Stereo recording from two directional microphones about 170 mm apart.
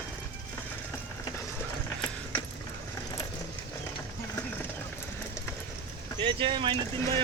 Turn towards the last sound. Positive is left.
turn(degrees=-30)  # may be behind; listen again after turning